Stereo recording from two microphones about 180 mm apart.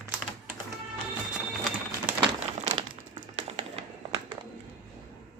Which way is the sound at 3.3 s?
35° right (ahead or behind).